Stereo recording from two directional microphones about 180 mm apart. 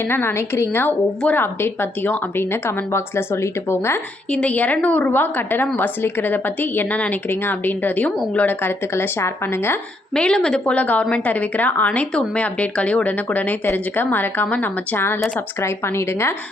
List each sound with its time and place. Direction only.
0.0 s a woman's voice: 10° left (ahead or behind)